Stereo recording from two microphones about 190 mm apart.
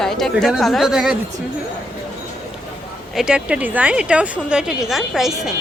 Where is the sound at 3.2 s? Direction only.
5° right (ahead or behind).